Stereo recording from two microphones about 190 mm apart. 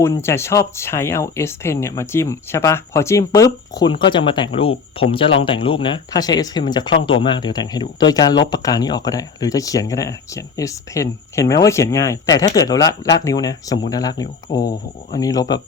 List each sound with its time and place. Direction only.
0.0 s speech: 15° left (ahead or behind)